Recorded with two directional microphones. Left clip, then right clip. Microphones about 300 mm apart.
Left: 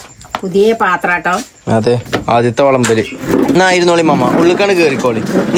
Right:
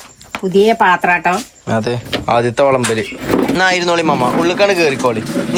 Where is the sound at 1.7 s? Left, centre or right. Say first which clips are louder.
Left 5 dB; centre.